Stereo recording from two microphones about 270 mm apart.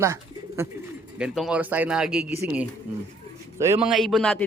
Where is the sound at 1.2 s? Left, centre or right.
Centre.